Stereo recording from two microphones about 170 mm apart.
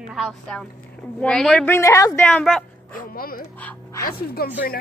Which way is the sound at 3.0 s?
60° left (ahead or behind).